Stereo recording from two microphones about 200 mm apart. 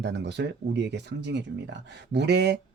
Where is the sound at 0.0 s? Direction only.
60° right (ahead or behind).